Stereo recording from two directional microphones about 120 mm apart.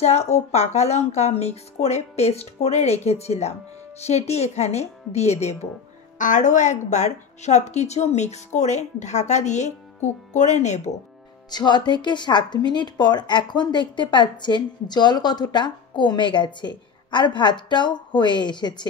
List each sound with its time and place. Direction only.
0.0 s speech: 65° left (ahead or behind)
6.1 s a woman's voice: 90° left
11.5 s speech: 35° left (ahead or behind)